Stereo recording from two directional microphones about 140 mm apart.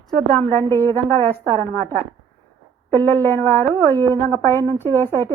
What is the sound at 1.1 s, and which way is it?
Speech, 15° left (ahead or behind).